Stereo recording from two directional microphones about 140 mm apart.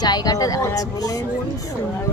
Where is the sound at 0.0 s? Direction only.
30° left (ahead or behind).